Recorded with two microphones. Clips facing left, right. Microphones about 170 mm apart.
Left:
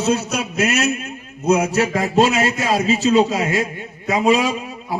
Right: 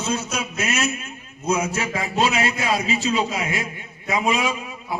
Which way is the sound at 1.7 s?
40° left (ahead or behind).